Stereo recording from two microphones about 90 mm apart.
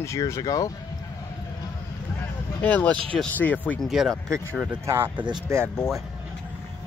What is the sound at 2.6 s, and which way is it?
Speech, 15° left (ahead or behind).